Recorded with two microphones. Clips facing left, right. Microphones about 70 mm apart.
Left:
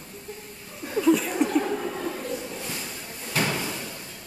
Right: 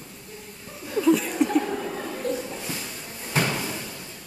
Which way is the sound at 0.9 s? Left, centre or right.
Centre.